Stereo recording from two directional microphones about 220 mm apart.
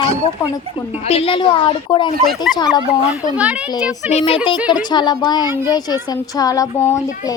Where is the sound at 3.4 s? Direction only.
5° right (ahead or behind).